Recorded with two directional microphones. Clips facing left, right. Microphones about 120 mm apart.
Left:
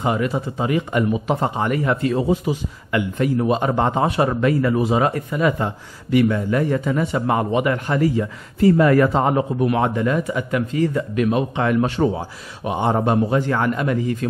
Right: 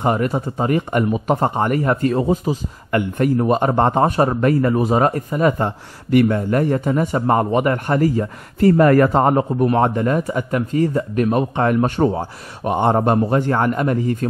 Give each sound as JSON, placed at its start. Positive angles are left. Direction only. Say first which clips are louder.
{"t": 0.0, "sound": "speech", "louder": "right 2 dB", "side_deg": -45}